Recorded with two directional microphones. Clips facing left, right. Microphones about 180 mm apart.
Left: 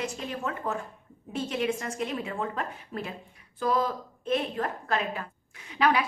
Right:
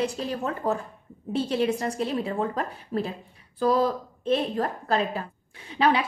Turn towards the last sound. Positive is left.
turn(degrees=-30)  # may be behind; listen again after turning